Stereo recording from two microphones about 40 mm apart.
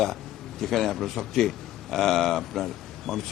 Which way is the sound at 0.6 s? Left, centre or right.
Centre.